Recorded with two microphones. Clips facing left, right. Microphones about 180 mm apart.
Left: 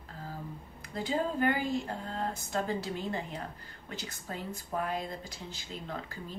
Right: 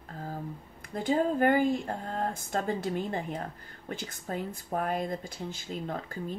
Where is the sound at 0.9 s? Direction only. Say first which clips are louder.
Right 5 dB; 50° right (ahead or behind).